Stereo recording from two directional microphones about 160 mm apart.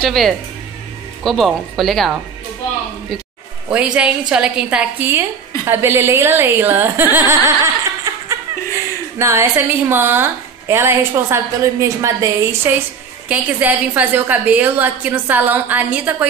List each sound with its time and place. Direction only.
0.0 s speech: centre (ahead or behind)
3.7 s a woman's voice: 5° right (ahead or behind)